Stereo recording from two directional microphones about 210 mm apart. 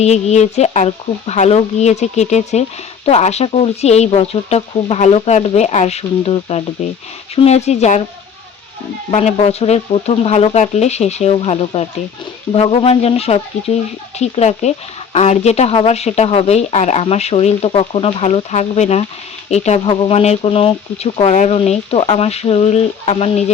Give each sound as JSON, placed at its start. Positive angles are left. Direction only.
{"t": 0.0, "sound": "speech", "side_deg": 30}
{"t": 9.0, "sound": "speech", "side_deg": 30}